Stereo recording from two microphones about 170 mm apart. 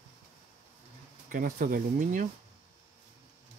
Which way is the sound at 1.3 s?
55° right (ahead or behind).